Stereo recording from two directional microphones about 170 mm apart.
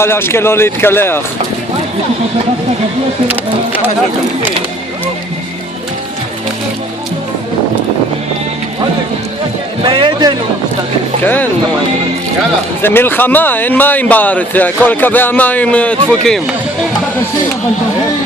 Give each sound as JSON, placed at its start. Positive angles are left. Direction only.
{"t": 0.0, "sound": "speech", "side_deg": 15}
{"t": 9.8, "sound": "a man's voice", "side_deg": -30}
{"t": 11.2, "sound": "speech", "side_deg": 10}
{"t": 12.8, "sound": "speech", "side_deg": 10}